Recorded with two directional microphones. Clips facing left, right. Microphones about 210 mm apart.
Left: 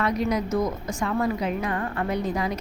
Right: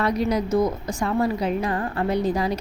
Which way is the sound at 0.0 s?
35° right (ahead or behind).